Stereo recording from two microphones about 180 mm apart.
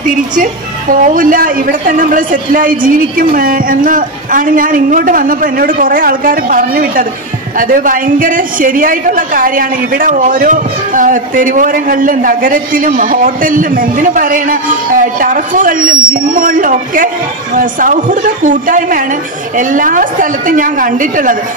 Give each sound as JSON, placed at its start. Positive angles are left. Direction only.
{"t": 0.0, "sound": "a man's voice", "side_deg": -50}